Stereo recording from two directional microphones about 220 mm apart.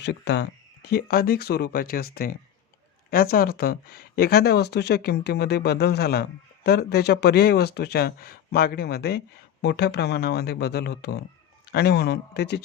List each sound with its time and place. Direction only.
0.0 s speech: 50° left (ahead or behind)